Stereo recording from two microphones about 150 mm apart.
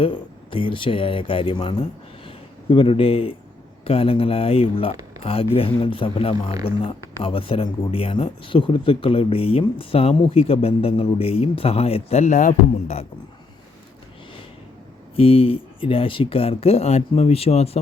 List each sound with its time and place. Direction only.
0.0 s speech: 35° left (ahead or behind)
1.8 s a sound: 35° left (ahead or behind)
3.8 s speech: 40° left (ahead or behind)
15.1 s speech: 40° left (ahead or behind)